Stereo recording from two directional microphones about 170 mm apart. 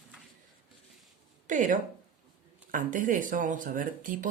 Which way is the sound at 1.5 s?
50° right (ahead or behind).